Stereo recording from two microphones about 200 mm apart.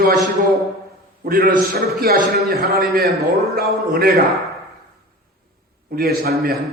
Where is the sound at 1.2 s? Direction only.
50° right (ahead or behind).